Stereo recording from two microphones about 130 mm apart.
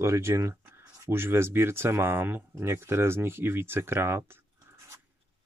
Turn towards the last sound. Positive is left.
turn(degrees=-20)  # may be behind; listen again after turning